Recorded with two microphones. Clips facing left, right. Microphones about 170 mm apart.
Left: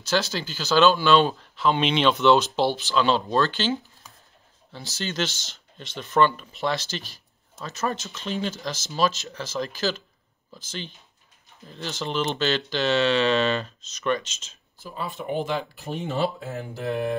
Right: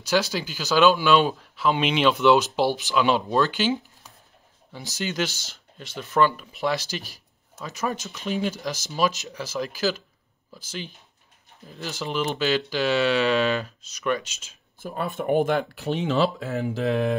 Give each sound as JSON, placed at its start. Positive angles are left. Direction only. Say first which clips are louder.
{"t": 0.0, "sound": "speech", "louder": "right 2 dB", "side_deg": -10}
{"t": 14.8, "sound": "speech", "louder": "right 4 dB", "side_deg": -55}